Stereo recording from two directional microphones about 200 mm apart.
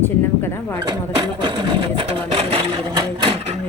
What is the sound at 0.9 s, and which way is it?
Speech, 20° right (ahead or behind).